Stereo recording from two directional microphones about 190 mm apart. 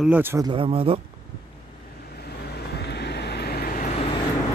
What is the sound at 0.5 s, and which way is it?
Speech, 30° right (ahead or behind).